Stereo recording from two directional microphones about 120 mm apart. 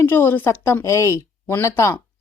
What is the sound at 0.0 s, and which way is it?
A woman's voice, 15° left (ahead or behind).